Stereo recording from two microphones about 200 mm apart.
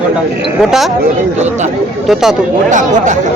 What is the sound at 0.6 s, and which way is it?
Speech, centre (ahead or behind).